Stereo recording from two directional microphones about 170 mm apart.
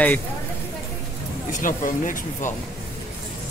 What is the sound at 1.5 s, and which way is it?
Speech, 50° left (ahead or behind).